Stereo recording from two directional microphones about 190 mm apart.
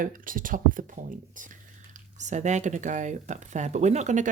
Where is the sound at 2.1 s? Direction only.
40° right (ahead or behind).